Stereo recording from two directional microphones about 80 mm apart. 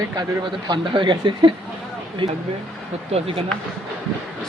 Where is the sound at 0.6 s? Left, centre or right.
Right.